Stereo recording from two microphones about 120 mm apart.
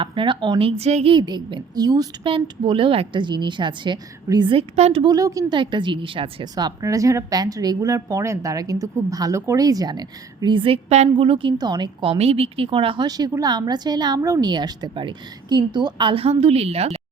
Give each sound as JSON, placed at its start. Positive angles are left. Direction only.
{"t": 0.0, "sound": "a woman's voice", "side_deg": -45}
{"t": 0.8, "sound": "a woman's voice", "side_deg": -65}
{"t": 1.1, "sound": "a woman's voice", "side_deg": -40}
{"t": 2.2, "sound": "a woman's voice", "side_deg": -45}
{"t": 4.5, "sound": "a woman's voice", "side_deg": -55}
{"t": 5.0, "sound": "a woman's voice", "side_deg": -30}
{"t": 5.5, "sound": "a woman's voice", "side_deg": -40}
{"t": 10.8, "sound": "a woman's voice", "side_deg": -65}
{"t": 11.2, "sound": "a woman's voice", "side_deg": -50}
{"t": 12.1, "sound": "a woman's voice", "side_deg": -60}
{"t": 13.1, "sound": "a woman's voice", "side_deg": -30}
{"t": 14.5, "sound": "a woman's voice", "side_deg": -35}
{"t": 16.2, "sound": "a woman's voice", "side_deg": -55}